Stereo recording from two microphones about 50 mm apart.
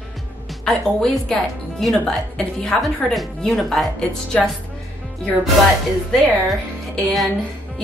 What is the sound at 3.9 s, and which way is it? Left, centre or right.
Speech, centre.